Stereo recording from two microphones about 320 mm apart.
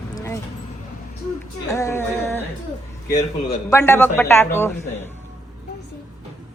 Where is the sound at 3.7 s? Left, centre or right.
Centre.